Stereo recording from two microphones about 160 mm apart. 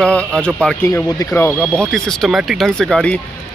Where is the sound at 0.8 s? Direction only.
20° left (ahead or behind).